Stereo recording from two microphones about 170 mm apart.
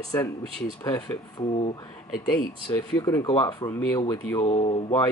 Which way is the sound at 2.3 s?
5° left (ahead or behind).